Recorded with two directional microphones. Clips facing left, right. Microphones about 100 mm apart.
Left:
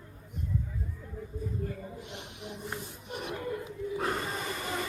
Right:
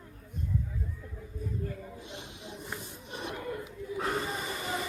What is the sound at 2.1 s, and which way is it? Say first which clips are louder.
Snake: left 1 dB; 60° left (ahead or behind).